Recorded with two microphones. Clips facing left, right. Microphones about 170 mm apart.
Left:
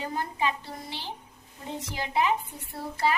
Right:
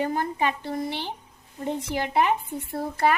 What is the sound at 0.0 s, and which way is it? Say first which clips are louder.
A woman's voice: right 5 dB; 55° right (ahead or behind).